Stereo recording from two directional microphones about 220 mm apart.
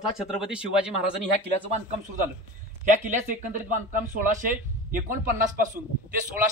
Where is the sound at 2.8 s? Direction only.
35° right (ahead or behind).